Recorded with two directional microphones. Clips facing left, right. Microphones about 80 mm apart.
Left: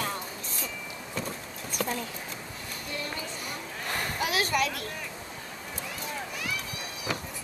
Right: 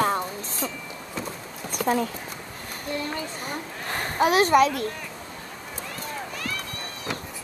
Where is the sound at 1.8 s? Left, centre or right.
Right.